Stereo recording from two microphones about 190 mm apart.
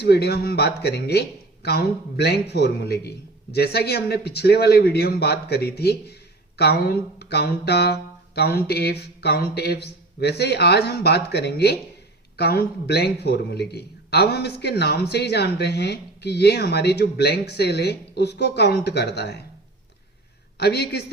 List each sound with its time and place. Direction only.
0.0 s a man's voice: 60° left (ahead or behind)
20.6 s a man's voice: 55° left (ahead or behind)